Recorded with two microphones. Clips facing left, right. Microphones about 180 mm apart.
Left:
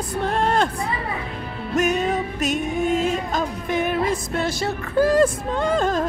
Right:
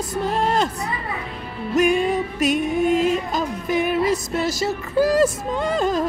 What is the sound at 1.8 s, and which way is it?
Music, 45° left (ahead or behind).